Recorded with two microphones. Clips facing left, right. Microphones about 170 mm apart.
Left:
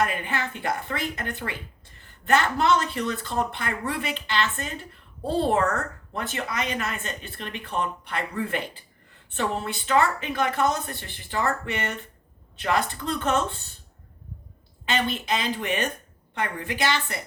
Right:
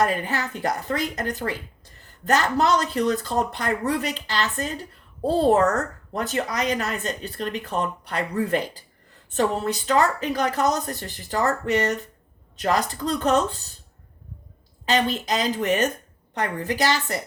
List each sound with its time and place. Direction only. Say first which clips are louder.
0.0 s speech: right 3 dB; 40° right (ahead or behind)
14.8 s speech: right 3 dB; 40° right (ahead or behind)